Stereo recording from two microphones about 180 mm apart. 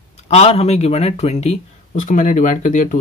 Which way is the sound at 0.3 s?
35° left (ahead or behind).